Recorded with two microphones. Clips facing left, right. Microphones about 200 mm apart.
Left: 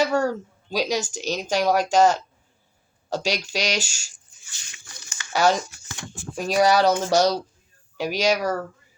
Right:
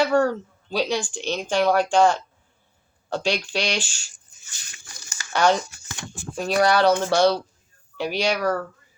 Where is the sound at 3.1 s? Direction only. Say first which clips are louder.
Right 1 dB; 10° left (ahead or behind).